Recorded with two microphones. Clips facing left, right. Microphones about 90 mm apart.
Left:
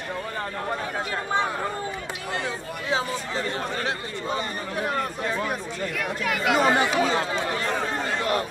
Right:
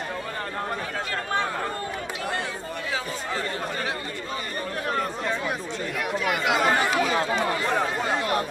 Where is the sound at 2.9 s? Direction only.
25° left (ahead or behind).